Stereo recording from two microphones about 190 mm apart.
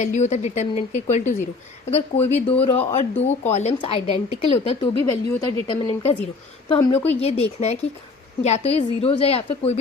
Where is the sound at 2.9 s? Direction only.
30° left (ahead or behind).